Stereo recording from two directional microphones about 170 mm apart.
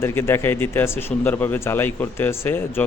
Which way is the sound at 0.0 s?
15° left (ahead or behind).